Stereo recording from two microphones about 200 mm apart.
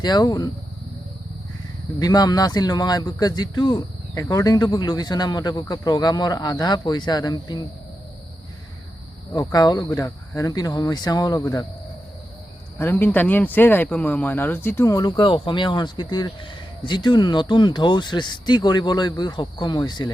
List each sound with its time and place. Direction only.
0.0 s speech: 20° left (ahead or behind)
2.0 s speech: 20° left (ahead or behind)
9.3 s speech: 20° left (ahead or behind)
12.8 s speech: 10° left (ahead or behind)